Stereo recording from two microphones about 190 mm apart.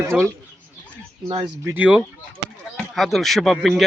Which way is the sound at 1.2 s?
30° right (ahead or behind).